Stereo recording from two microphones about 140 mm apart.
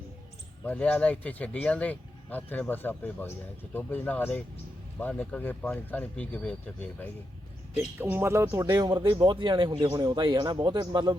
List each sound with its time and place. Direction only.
0.6 s speech: 10° left (ahead or behind)
8.0 s speech: 15° right (ahead or behind); by 11.2 s 30° right (ahead or behind)